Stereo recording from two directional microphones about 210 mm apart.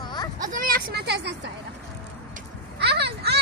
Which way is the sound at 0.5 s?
40° right (ahead or behind).